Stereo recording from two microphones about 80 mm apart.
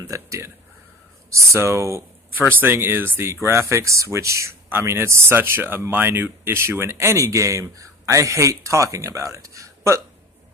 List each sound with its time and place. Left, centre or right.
0.1 s speech: right
2.5 s speech: right